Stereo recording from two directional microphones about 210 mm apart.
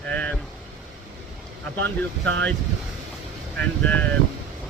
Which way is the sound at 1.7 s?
65° right (ahead or behind).